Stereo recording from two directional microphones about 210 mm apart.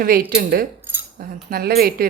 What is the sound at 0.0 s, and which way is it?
Speech, 45° right (ahead or behind).